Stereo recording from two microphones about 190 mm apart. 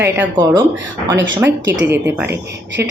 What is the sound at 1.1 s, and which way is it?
Speech, 75° right (ahead or behind).